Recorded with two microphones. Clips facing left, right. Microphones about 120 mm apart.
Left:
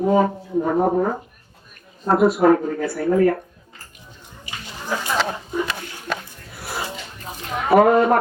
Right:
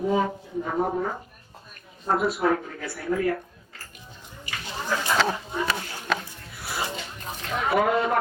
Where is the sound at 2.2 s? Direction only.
45° left (ahead or behind).